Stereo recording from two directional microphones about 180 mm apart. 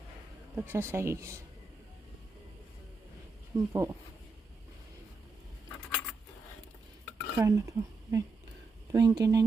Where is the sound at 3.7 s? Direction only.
15° right (ahead or behind).